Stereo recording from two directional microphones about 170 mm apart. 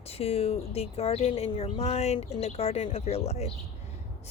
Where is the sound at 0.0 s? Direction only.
35° left (ahead or behind).